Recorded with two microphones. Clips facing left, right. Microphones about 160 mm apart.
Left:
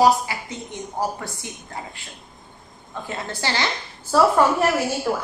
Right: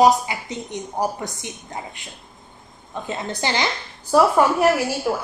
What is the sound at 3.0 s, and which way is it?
A woman's voice, 20° right (ahead or behind).